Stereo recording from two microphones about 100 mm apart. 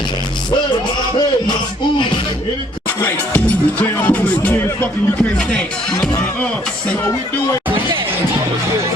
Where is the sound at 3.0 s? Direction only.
20° left (ahead or behind).